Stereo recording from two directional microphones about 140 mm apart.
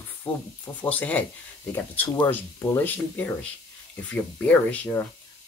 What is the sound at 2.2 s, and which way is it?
Speech, 15° left (ahead or behind).